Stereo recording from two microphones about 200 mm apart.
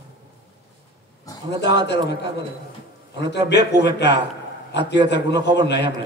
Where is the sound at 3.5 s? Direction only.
60° left (ahead or behind).